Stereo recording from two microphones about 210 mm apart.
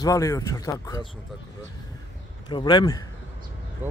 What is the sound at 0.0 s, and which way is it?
A man's voice, 15° left (ahead or behind).